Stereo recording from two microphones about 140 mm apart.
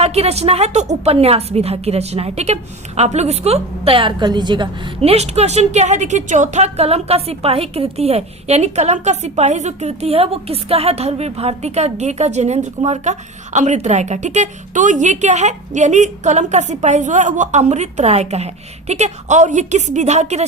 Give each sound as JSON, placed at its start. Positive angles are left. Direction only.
{"t": 0.0, "sound": "a woman's voice", "side_deg": -50}